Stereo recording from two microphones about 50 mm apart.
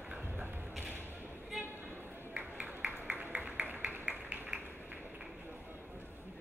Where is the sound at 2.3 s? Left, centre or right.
Right.